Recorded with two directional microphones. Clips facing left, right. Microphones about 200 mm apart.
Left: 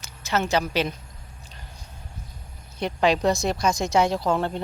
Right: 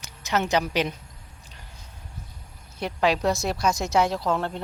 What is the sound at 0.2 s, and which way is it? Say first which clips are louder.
Speech: even; 15° right (ahead or behind).